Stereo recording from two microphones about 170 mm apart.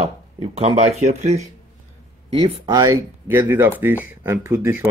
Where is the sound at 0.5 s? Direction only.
40° right (ahead or behind).